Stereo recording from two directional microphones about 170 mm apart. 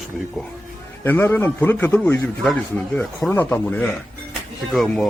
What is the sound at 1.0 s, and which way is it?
A man's voice, 10° left (ahead or behind).